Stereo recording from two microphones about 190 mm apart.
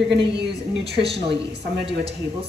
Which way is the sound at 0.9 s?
60° right (ahead or behind).